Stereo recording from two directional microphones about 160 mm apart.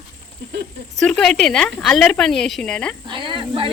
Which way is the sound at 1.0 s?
5° left (ahead or behind).